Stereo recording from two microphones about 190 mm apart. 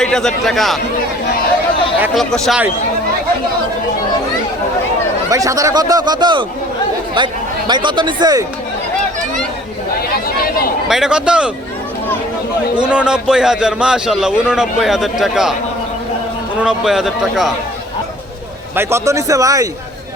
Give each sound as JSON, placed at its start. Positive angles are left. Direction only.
{"t": 0.0, "sound": "a man's voice", "side_deg": 5}
{"t": 2.1, "sound": "a man's voice", "side_deg": 0}
{"t": 5.3, "sound": "speech", "side_deg": -15}
{"t": 10.8, "sound": "a man's voice", "side_deg": 0}
{"t": 12.7, "sound": "a man's voice", "side_deg": -5}
{"t": 16.6, "sound": "a man's voice", "side_deg": -5}
{"t": 18.8, "sound": "speech", "side_deg": -15}